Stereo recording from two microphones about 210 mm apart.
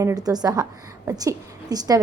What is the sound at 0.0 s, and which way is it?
A woman's voice, 15° right (ahead or behind).